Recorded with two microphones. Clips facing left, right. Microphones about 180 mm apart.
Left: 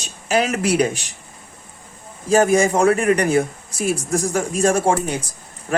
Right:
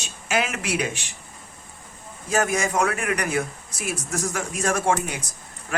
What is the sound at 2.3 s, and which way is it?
Speech, 30° left (ahead or behind).